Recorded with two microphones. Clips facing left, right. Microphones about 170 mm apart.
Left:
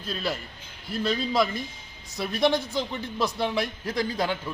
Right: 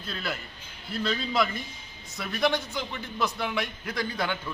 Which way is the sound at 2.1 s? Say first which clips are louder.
Left 3 dB; 35° left (ahead or behind).